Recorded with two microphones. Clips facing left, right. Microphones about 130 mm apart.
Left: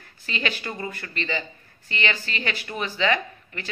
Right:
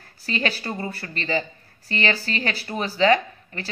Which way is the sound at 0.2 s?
35° right (ahead or behind).